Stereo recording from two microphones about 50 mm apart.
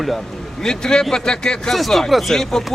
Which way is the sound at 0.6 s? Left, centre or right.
Centre.